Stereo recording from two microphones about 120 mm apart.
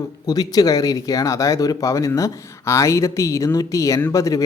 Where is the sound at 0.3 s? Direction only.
30° left (ahead or behind).